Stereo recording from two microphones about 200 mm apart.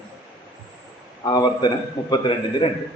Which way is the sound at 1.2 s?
20° left (ahead or behind).